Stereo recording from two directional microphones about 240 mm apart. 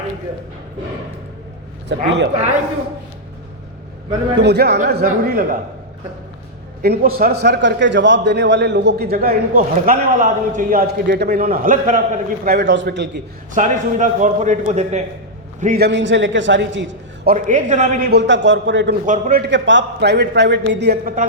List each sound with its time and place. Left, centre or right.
1.9 s a man's voice: right
4.4 s a man's voice: right
6.8 s a man's voice: right
13.5 s a man's voice: right
15.6 s a man's voice: right
17.2 s a man's voice: right
19.0 s a man's voice: right
19.5 s a man's voice: right